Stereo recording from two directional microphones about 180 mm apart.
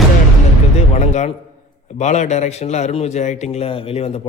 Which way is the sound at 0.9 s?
40° left (ahead or behind).